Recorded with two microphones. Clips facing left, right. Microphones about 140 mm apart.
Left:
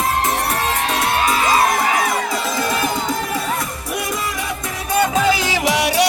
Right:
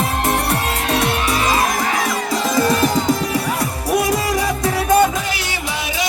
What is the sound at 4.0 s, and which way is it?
Music, 35° right (ahead or behind).